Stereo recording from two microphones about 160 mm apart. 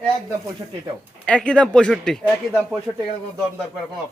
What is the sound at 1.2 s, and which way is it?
Speech, 5° left (ahead or behind).